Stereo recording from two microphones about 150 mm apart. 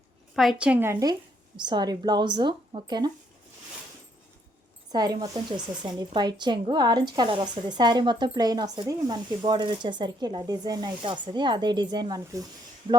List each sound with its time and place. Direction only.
0.3 s a woman's voice: 5° right (ahead or behind); by 3.1 s 30° right (ahead or behind)
4.9 s speech: 25° right (ahead or behind)